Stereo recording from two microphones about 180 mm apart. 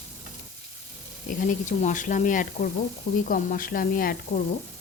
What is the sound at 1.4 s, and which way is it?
Speech, 45° left (ahead or behind).